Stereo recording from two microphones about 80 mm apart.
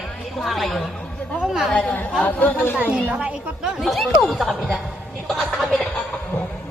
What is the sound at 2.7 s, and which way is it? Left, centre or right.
Speech, centre.